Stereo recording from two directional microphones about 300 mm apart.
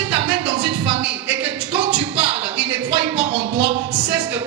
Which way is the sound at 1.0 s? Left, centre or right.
Centre.